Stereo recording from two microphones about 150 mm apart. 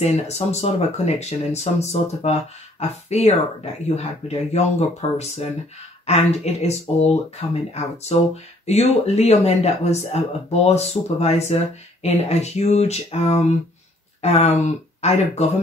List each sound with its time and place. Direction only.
0.0 s speech: 45° left (ahead or behind)